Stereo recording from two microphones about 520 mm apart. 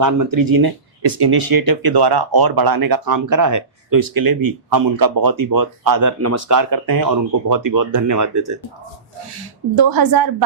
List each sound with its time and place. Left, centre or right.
0.0 s speech: right
9.7 s speech: right